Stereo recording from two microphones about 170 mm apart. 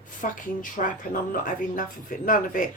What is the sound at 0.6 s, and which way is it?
Speech, 50° left (ahead or behind).